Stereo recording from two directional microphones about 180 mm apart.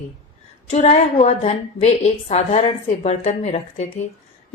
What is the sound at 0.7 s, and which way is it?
Speech, 40° left (ahead or behind).